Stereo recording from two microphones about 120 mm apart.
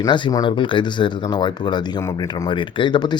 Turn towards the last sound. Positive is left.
turn(degrees=40)  # may be behind; listen again after turning